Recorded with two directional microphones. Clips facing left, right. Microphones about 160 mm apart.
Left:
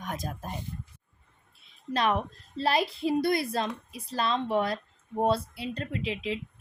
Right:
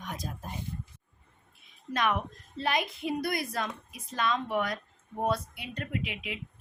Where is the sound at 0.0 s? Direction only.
50° left (ahead or behind).